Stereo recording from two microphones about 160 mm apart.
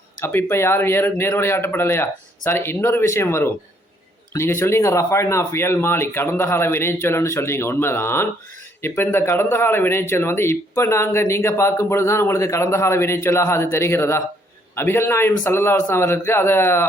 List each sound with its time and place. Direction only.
0.2 s speech: 10° left (ahead or behind)